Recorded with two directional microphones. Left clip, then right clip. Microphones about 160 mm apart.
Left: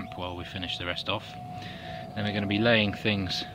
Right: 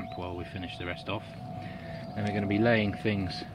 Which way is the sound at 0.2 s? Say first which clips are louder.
Left 3 dB; 20° left (ahead or behind).